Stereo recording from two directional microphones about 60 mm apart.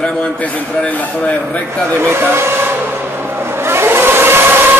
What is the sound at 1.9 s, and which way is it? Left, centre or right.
Speech, right.